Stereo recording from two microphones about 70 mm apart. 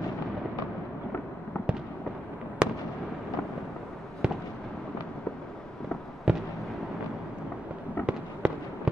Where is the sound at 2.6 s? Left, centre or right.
Centre.